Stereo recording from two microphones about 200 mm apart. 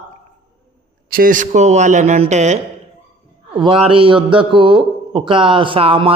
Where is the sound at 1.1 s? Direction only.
45° right (ahead or behind).